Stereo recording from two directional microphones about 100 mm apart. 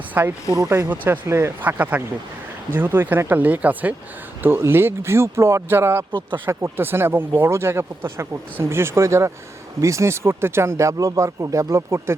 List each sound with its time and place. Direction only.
0.1 s mechanisms: 20° right (ahead or behind)
0.5 s speech: 30° right (ahead or behind)
0.9 s speech: 20° right (ahead or behind)